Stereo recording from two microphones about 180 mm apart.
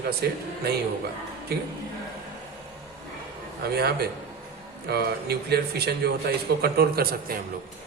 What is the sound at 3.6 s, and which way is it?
A man's voice, 60° right (ahead or behind).